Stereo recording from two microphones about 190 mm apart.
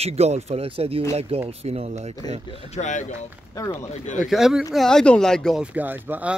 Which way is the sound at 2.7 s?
40° left (ahead or behind).